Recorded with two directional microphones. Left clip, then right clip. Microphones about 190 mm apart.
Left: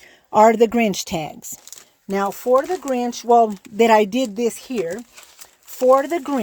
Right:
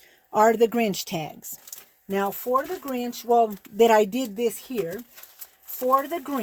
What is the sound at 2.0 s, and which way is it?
Speech, 55° left (ahead or behind).